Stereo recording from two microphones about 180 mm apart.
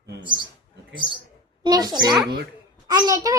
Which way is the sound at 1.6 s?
20° right (ahead or behind).